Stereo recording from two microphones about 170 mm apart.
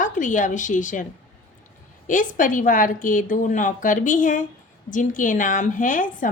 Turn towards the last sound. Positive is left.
turn(degrees=50)  # may be behind; listen again after turning